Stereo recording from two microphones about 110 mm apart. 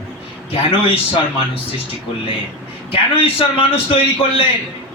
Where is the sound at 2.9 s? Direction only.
55° left (ahead or behind).